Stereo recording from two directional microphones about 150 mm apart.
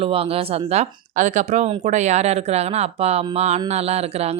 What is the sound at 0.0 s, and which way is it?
Speech, 40° right (ahead or behind).